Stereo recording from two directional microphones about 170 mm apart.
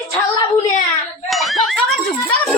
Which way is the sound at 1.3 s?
Centre (ahead or behind).